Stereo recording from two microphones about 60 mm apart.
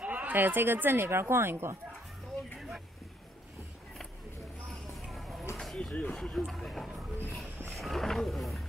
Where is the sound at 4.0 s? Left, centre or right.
Centre.